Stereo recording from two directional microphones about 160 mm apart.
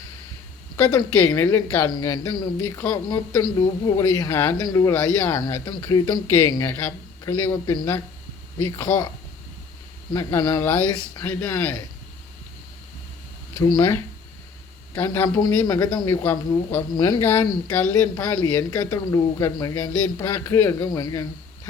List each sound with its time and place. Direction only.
0.8 s a man's voice: 20° left (ahead or behind)
10.1 s a man's voice: 20° left (ahead or behind)
13.6 s a man's voice: 20° left (ahead or behind)